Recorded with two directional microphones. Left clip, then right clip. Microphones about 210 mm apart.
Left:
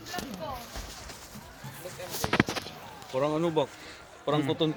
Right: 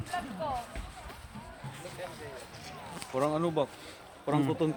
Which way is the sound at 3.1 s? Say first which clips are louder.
Left 2 dB; 50° left (ahead or behind).